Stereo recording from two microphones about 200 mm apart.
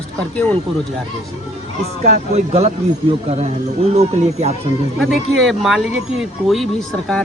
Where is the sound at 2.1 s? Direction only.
30° right (ahead or behind).